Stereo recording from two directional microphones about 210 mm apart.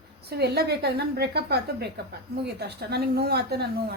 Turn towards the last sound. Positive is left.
turn(degrees=-50)  # may be behind; listen again after turning